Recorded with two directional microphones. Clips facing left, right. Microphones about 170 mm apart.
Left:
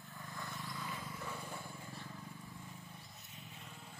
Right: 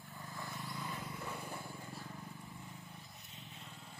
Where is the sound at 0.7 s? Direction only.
20° right (ahead or behind).